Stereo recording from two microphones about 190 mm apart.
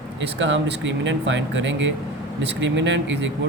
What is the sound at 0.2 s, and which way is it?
Speech, 75° right (ahead or behind).